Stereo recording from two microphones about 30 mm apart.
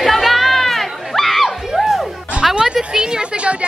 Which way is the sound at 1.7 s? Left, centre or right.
Centre.